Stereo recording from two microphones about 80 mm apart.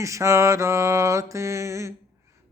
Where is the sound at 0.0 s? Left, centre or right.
Right.